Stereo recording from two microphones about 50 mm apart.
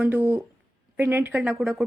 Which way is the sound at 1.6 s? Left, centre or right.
Centre.